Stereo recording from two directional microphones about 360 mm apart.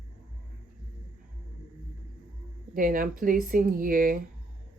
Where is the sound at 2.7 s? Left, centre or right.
Right.